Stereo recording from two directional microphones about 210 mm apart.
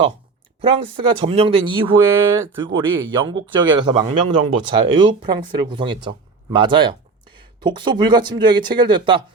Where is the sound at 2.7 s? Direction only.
20° right (ahead or behind).